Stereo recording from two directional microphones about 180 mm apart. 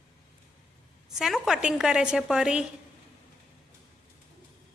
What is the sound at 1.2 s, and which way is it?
A woman's voice, centre (ahead or behind).